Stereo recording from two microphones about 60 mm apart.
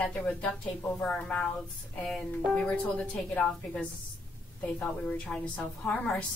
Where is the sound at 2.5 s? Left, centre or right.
Centre.